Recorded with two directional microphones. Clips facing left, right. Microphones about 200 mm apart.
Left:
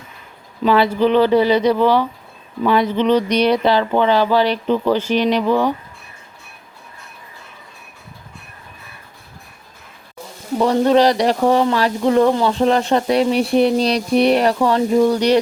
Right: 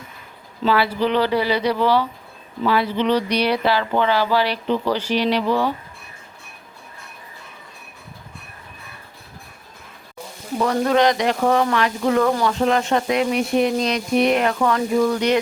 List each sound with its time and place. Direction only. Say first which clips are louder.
0.6 s speech: left 5 dB; 20° left (ahead or behind)
10.6 s speech: left 4 dB; 30° left (ahead or behind)